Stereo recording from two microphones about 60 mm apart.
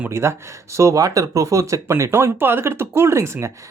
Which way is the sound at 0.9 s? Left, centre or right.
Right.